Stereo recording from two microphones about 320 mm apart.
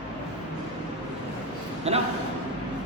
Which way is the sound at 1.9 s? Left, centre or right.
Centre.